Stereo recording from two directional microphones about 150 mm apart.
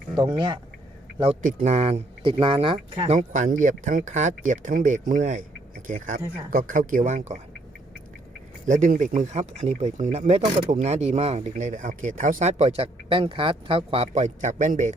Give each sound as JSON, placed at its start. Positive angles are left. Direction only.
{"t": 0.3, "sound": "speech", "side_deg": -30}
{"t": 1.5, "sound": "speech", "side_deg": -45}
{"t": 3.2, "sound": "speech", "side_deg": -55}
{"t": 8.6, "sound": "speech", "side_deg": -60}